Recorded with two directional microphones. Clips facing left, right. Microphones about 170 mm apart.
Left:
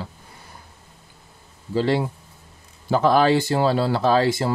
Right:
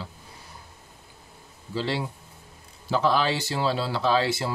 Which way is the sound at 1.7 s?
50° left (ahead or behind).